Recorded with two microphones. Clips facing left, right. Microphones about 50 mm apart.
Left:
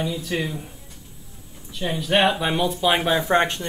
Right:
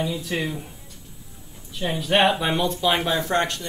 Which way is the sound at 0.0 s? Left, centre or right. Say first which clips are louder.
Even; centre.